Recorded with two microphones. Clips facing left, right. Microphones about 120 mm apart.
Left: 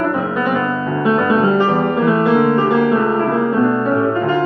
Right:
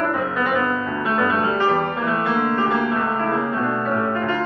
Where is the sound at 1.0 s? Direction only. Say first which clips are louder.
Left 7 dB; 10° left (ahead or behind).